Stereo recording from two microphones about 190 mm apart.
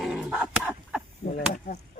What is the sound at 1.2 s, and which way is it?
Speech, 40° left (ahead or behind).